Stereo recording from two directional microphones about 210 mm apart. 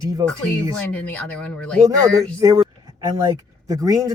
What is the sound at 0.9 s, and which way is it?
Speech, 5° left (ahead or behind).